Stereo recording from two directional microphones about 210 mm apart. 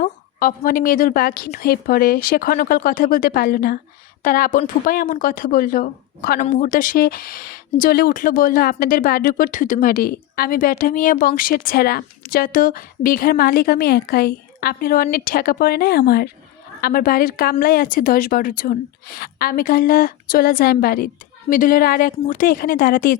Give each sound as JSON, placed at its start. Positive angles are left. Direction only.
{"t": 0.0, "sound": "a woman's voice", "side_deg": 40}